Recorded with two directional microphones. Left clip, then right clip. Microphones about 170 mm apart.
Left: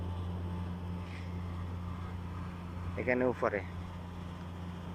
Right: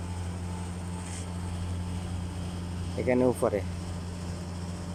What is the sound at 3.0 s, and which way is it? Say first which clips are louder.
Speech: right 5 dB; 20° right (ahead or behind).